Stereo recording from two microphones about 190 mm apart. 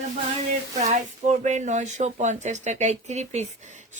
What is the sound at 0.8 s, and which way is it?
Speech, 40° right (ahead or behind).